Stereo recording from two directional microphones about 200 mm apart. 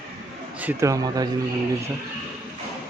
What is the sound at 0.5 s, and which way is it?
Speech, 10° right (ahead or behind).